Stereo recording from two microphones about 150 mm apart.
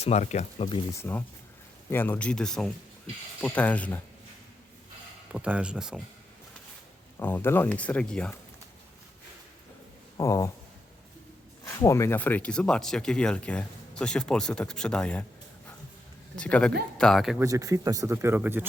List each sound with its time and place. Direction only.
0.0 s speech: 50° left (ahead or behind)
0.9 s speech: 15° left (ahead or behind)
5.3 s speech: 10° right (ahead or behind)
7.2 s speech: 15° left (ahead or behind)
10.2 s speech: 20° left (ahead or behind)
11.6 s speech: 20° left (ahead or behind)
16.3 s speech: 5° left (ahead or behind)
17.4 s speech: 25° right (ahead or behind)